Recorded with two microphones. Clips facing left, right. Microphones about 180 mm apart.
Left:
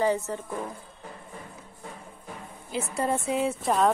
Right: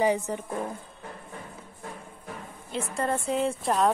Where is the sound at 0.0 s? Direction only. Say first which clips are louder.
Right 1 dB; 15° right (ahead or behind).